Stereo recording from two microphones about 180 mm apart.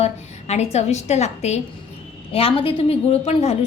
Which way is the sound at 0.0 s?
35° left (ahead or behind).